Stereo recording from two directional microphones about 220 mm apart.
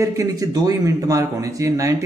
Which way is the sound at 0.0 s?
15° right (ahead or behind).